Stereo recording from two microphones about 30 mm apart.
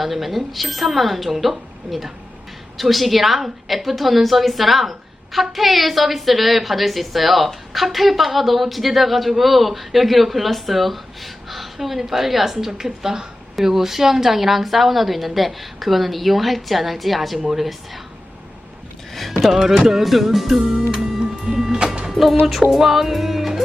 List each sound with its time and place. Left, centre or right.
0.0 s a woman's voice: centre
12.7 s music: centre
13.6 s a woman's voice: centre
19.1 s speech: centre
19.5 s music: centre
20.9 s music: right
22.1 s a woman's voice: centre
22.7 s music: centre